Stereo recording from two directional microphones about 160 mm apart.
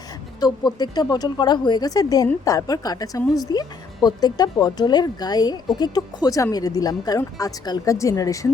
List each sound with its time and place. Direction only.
0.3 s speech: 25° left (ahead or behind)